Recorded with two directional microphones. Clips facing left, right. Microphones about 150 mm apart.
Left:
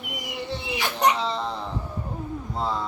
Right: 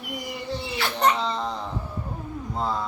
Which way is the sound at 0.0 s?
20° left (ahead or behind).